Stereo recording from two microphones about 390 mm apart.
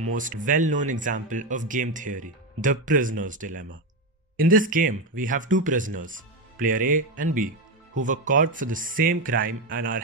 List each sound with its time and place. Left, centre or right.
0.1 s speech: centre